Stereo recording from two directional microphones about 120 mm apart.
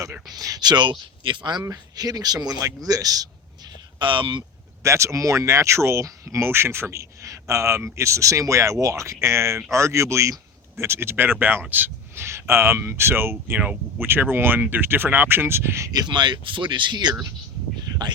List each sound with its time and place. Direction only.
0.3 s speech: 30° right (ahead or behind)
4.0 s speech: 45° right (ahead or behind)
4.8 s speech: 25° right (ahead or behind); by 17.1 s 40° right (ahead or behind)